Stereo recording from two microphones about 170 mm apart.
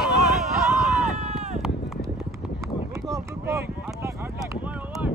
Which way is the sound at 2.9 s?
20° right (ahead or behind).